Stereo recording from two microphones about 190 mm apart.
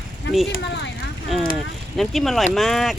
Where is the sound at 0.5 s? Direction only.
65° left (ahead or behind).